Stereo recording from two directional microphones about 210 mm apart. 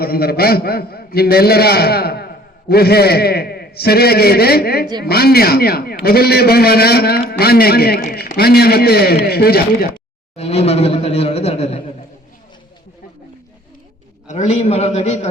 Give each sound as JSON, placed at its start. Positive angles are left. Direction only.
{"t": 0.0, "sound": "a man's voice", "side_deg": 45}
{"t": 10.3, "sound": "a man's voice", "side_deg": 30}
{"t": 14.3, "sound": "a man's voice", "side_deg": 35}